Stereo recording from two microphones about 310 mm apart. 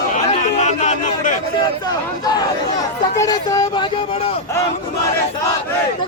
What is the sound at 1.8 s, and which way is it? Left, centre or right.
Speech, centre.